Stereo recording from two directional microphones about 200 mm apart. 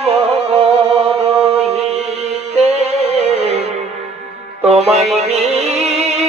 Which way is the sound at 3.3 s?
55° left (ahead or behind).